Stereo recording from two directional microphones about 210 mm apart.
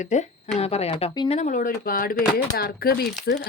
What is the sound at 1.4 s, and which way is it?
A woman's voice, 35° left (ahead or behind).